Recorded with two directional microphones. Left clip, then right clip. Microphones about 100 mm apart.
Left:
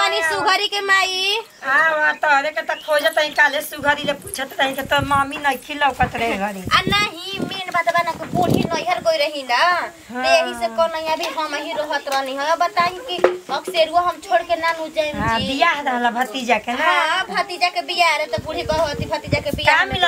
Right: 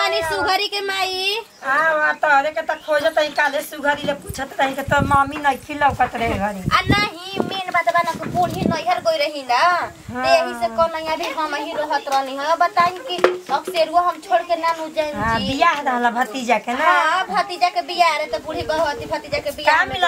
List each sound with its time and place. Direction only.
0.3 s a child's voice: 35° left (ahead or behind)
1.7 s speech: centre (ahead or behind)
16.7 s speech: centre (ahead or behind)